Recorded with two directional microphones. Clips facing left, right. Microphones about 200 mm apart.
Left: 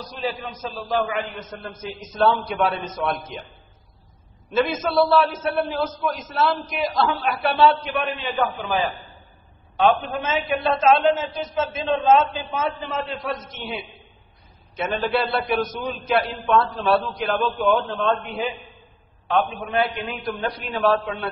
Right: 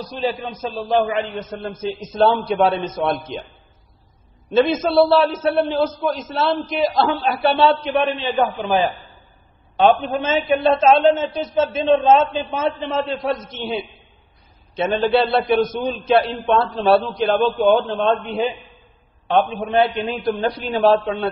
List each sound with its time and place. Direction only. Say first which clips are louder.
0.5 s a man's voice: right 5 dB; 25° right (ahead or behind)
4.5 s a man's voice: right 5 dB; 30° right (ahead or behind)
9.8 s a man's voice: right 4 dB; 25° right (ahead or behind)